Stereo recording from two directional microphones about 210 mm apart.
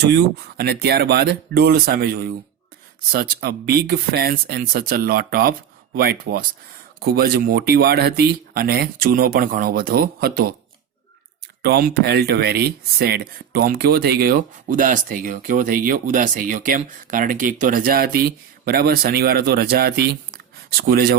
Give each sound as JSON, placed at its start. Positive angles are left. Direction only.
{"t": 0.0, "sound": "speech", "side_deg": -50}
{"t": 11.6, "sound": "speech", "side_deg": -50}